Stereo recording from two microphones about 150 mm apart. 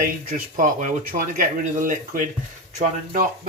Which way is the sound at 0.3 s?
60° right (ahead or behind).